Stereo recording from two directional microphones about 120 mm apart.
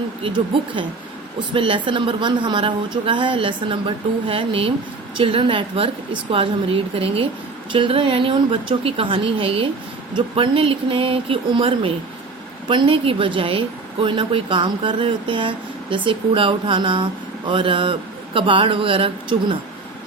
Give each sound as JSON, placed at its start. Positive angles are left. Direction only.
{"t": 0.2, "sound": "a woman's voice", "side_deg": -45}